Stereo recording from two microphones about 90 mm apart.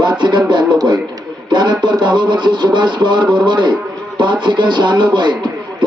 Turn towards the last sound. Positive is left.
turn(degrees=-55)  # may be behind; listen again after turning